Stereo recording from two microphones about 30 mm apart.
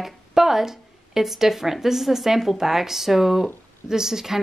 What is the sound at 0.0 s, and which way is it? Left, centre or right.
Speech, centre.